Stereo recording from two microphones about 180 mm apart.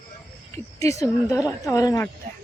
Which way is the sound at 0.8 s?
15° left (ahead or behind).